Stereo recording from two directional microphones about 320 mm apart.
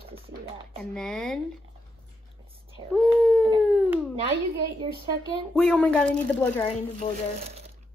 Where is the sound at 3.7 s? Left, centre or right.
Centre.